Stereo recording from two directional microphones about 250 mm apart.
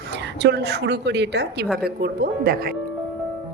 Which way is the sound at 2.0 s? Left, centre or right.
Right.